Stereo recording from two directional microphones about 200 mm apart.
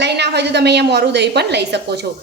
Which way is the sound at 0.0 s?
55° right (ahead or behind).